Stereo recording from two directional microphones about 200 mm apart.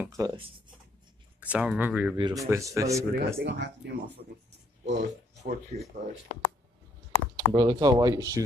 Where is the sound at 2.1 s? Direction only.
20° right (ahead or behind).